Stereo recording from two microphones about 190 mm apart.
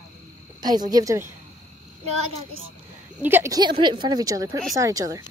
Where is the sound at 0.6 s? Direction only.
20° right (ahead or behind).